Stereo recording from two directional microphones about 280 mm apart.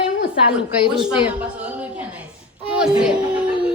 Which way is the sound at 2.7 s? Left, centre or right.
Centre.